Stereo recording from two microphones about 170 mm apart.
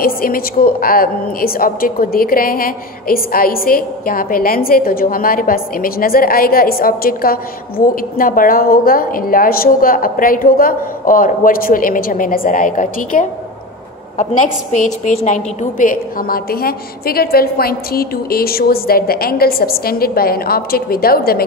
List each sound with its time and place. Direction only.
0.0 s a woman's voice: 60° left (ahead or behind)